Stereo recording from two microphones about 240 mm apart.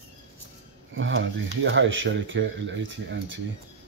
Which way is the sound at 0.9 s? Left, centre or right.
Right.